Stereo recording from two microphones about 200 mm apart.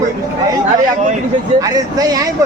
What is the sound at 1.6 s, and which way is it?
Speech, 20° right (ahead or behind).